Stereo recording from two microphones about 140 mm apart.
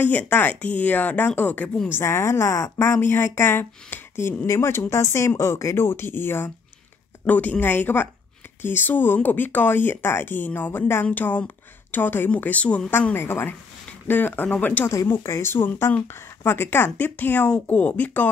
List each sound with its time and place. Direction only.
0.0 s speech: 10° left (ahead or behind)